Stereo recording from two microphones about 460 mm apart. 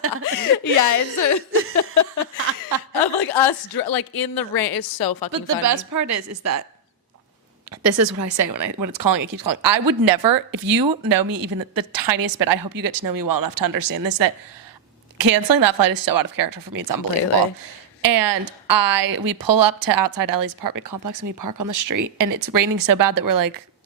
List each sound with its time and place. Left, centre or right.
0.3 s speech: left
3.0 s a sound: left
3.7 s a woman's voice: left
5.3 s a woman's voice: right
7.8 s a woman's voice: right
18.0 s speech: right